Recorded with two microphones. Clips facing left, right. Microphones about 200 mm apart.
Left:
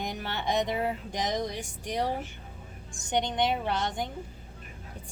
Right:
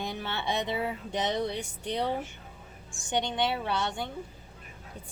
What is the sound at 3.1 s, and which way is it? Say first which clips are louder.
A woman's voice: left 2 dB; 20° left (ahead or behind).